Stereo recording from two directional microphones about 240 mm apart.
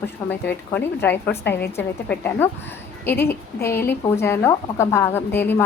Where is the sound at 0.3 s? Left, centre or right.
Centre.